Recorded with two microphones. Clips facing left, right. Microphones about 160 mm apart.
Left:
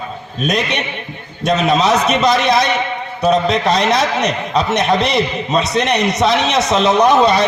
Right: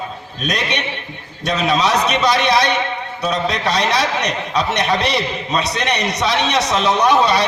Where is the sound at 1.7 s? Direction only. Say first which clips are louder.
Left 2 dB; 50° left (ahead or behind).